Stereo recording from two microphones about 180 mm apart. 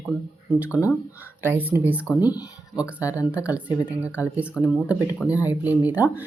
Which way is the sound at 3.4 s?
10° right (ahead or behind).